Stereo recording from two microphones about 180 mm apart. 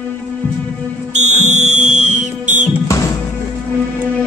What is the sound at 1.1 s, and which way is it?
Fire alarm, 40° right (ahead or behind).